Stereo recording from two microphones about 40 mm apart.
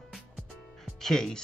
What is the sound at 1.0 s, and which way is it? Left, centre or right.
Speech, centre.